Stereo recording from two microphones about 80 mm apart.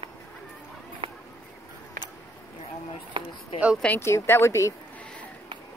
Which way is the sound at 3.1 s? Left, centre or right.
Right.